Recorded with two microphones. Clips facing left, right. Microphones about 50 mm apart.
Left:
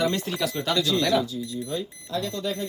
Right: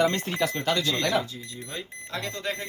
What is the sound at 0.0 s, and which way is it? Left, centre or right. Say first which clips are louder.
Speech: right 1 dB; right.